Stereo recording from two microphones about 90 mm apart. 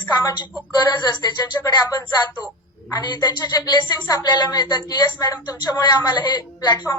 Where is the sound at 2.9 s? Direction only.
50° left (ahead or behind).